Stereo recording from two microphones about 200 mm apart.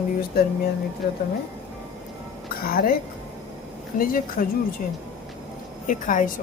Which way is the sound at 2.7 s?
45° left (ahead or behind).